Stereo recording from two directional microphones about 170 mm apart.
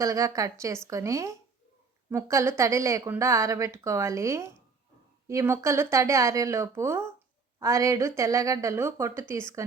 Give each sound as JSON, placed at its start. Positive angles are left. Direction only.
{"t": 0.0, "sound": "a woman's voice", "side_deg": -20}